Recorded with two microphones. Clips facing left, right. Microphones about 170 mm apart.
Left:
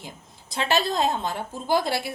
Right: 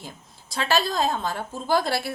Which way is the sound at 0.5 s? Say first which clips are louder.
Even; 20° left (ahead or behind).